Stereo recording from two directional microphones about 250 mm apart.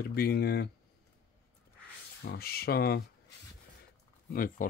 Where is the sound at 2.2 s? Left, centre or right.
Left.